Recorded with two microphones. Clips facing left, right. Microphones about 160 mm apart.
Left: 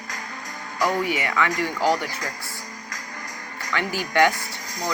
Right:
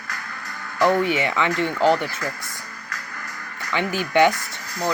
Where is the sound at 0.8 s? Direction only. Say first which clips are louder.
Right 5 dB; 25° right (ahead or behind).